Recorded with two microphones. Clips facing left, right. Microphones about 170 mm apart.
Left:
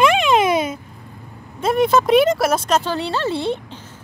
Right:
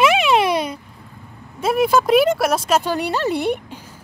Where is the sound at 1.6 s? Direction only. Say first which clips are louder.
Left 1 dB; 5° right (ahead or behind).